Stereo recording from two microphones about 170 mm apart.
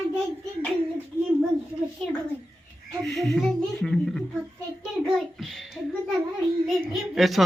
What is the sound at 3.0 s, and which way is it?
A woman's voice, centre (ahead or behind).